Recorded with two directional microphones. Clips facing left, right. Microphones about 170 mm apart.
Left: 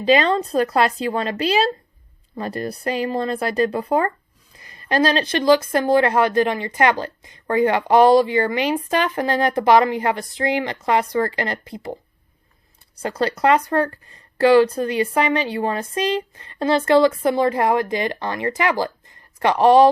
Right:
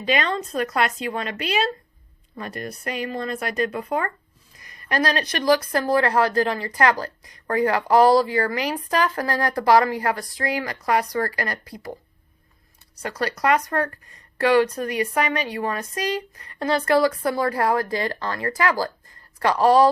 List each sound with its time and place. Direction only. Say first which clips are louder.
0.0 s speech: left 7 dB; 30° left (ahead or behind)
13.0 s speech: left 5 dB; 30° left (ahead or behind)